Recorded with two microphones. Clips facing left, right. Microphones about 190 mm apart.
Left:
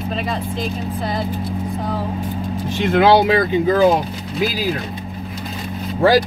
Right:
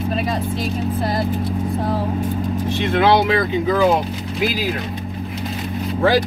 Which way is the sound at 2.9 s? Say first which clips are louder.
Left 3 dB; 40° left (ahead or behind).